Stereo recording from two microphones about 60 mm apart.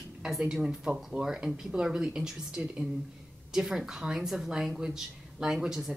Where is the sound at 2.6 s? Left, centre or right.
Right.